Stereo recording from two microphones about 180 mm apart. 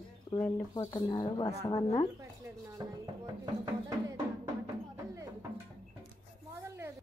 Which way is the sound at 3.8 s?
20° right (ahead or behind).